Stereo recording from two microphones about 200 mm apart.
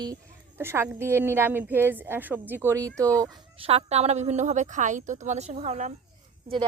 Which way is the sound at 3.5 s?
30° right (ahead or behind).